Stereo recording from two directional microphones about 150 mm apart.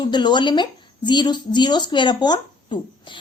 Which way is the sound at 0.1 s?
30° left (ahead or behind).